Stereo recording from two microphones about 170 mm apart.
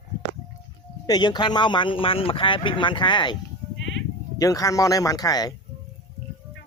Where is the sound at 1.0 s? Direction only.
25° left (ahead or behind).